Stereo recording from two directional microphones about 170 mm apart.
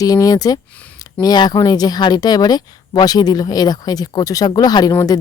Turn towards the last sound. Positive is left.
turn(degrees=25)  # may be behind; listen again after turning